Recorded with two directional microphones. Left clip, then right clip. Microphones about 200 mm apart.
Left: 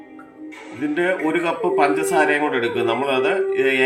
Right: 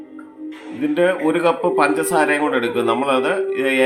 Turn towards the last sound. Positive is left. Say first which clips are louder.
# even
turn(degrees=-20)  # may be behind; listen again after turning